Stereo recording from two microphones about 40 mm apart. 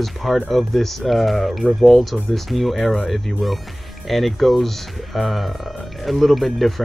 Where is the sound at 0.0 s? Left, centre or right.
Centre.